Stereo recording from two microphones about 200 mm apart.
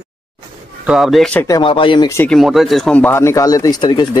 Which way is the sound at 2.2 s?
Centre (ahead or behind).